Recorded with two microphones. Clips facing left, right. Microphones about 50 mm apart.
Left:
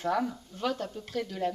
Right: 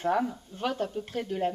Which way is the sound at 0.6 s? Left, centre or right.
Right.